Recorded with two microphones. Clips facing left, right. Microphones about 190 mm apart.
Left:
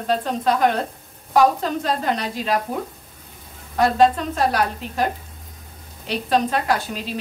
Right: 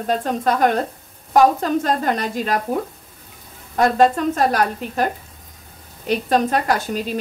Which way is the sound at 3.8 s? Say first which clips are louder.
Right 1 dB; 45° right (ahead or behind).